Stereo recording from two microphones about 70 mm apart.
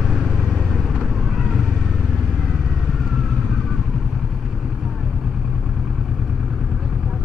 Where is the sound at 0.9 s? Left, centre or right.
Centre.